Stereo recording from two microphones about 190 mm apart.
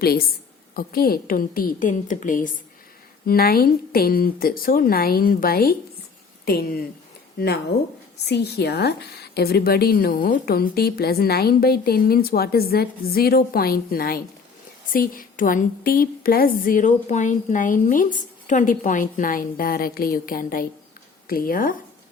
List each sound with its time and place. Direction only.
0.0 s a woman's voice: 55° left (ahead or behind)